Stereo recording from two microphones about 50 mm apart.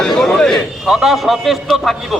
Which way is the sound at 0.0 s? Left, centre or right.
Centre.